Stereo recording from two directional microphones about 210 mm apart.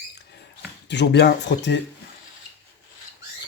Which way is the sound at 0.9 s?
55° left (ahead or behind).